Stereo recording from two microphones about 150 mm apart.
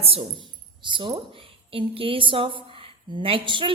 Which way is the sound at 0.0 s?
40° right (ahead or behind).